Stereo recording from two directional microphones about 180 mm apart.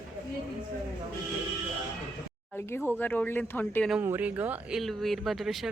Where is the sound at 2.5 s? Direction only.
10° left (ahead or behind).